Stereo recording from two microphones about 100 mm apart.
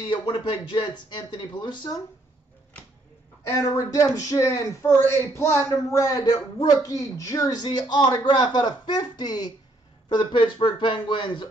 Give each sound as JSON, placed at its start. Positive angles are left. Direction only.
{"t": 0.1, "sound": "speech", "side_deg": 50}
{"t": 3.4, "sound": "speech", "side_deg": 30}